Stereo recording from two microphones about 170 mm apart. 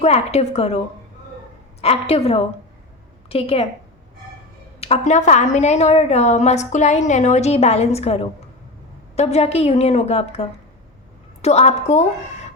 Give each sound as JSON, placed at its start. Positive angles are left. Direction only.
{"t": 0.0, "sound": "a woman's voice", "side_deg": 40}
{"t": 1.8, "sound": "a woman's voice", "side_deg": 35}
{"t": 4.8, "sound": "a woman's voice", "side_deg": 40}
{"t": 11.4, "sound": "a woman's voice", "side_deg": 40}